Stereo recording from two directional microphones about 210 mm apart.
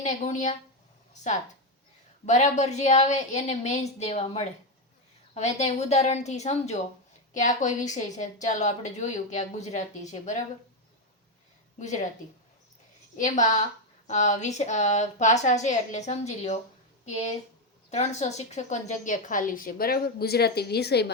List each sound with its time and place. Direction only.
0.0 s a woman's voice: 35° left (ahead or behind)
2.2 s a woman's voice: 35° left (ahead or behind)
11.8 s a woman's voice: 35° left (ahead or behind)
13.1 s a woman's voice: 35° left (ahead or behind); by 21.1 s 50° left (ahead or behind)